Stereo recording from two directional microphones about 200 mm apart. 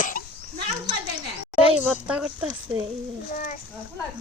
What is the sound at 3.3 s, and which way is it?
Speech, 40° left (ahead or behind).